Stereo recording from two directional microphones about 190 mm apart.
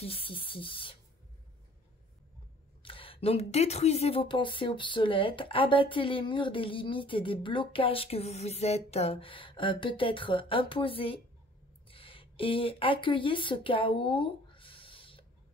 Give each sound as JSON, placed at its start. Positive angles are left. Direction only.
{"t": 0.0, "sound": "speech", "side_deg": 30}
{"t": 2.8, "sound": "speech", "side_deg": 30}